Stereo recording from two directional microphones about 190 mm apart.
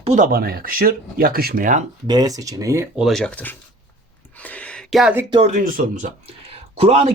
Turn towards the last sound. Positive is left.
turn(degrees=-30)  # may be behind; listen again after turning